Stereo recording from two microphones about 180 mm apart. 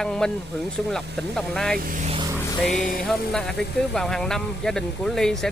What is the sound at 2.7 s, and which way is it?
Music, 45° left (ahead or behind).